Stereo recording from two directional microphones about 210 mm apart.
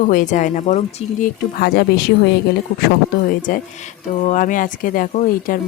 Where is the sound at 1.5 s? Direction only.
50° left (ahead or behind).